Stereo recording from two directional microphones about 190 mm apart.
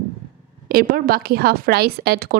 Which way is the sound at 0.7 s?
50° right (ahead or behind).